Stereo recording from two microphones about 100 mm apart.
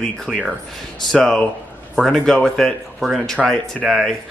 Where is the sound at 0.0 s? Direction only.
5° left (ahead or behind).